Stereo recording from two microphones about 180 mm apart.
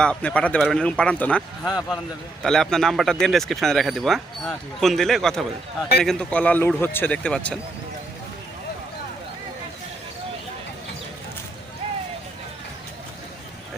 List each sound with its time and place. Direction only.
0.0 s speech: 5° left (ahead or behind)
1.6 s speech: 20° left (ahead or behind)
2.4 s a man's voice: 5° left (ahead or behind)